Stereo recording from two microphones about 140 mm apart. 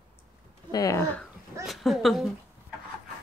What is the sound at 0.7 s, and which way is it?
Speech, 25° left (ahead or behind).